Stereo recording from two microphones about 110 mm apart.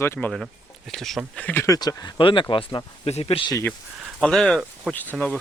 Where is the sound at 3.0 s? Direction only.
65° left (ahead or behind).